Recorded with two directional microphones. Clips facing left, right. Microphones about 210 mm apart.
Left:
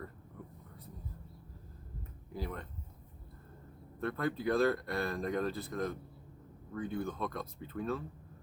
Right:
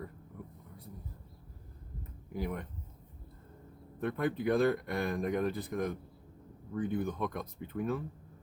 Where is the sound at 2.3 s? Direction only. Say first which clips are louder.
Right 4 dB; 15° right (ahead or behind).